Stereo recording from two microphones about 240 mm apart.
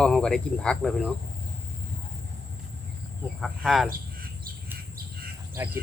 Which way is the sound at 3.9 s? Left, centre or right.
Right.